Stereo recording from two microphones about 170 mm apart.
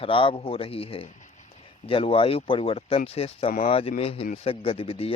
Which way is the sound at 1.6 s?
30° left (ahead or behind).